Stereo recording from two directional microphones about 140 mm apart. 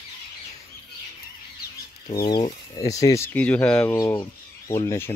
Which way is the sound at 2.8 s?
25° left (ahead or behind).